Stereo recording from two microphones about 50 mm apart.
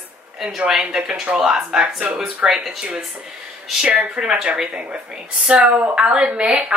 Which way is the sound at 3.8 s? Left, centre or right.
Right.